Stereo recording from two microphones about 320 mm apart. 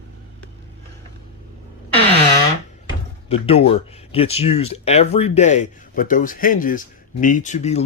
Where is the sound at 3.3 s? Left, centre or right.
Centre.